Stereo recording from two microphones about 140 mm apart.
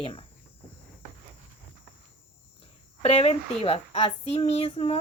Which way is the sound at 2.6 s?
45° left (ahead or behind).